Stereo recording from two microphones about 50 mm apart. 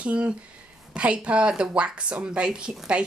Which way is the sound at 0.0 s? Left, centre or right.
Right.